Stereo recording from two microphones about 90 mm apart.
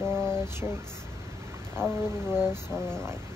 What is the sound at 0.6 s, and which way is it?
Speech, 20° right (ahead or behind).